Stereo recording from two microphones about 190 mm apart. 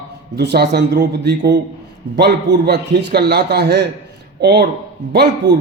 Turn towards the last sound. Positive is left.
turn(degrees=-60)  # may be behind; listen again after turning